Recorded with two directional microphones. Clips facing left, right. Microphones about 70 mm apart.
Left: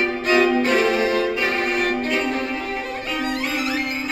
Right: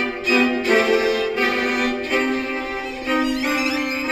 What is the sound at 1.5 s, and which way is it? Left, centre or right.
Music, right.